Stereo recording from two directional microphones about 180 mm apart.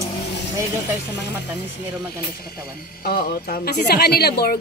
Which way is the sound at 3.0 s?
55° left (ahead or behind).